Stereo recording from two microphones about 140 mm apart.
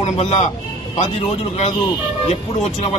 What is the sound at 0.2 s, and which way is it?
Speech, 50° left (ahead or behind).